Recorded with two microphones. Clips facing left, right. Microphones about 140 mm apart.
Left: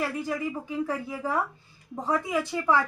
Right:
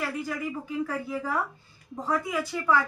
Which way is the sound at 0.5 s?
20° left (ahead or behind).